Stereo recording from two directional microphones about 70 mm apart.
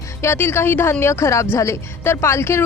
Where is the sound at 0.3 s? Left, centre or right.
Left.